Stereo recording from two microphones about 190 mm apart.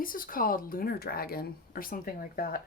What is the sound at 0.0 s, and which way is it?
Speech, 45° left (ahead or behind).